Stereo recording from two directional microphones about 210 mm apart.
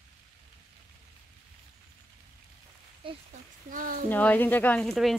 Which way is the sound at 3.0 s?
25° right (ahead or behind).